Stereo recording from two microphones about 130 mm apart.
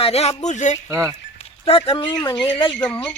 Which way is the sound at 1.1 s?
50° left (ahead or behind).